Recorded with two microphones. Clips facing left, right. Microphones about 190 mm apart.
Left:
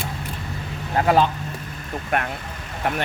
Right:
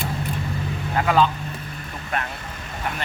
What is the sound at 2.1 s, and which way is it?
Speech, 55° left (ahead or behind).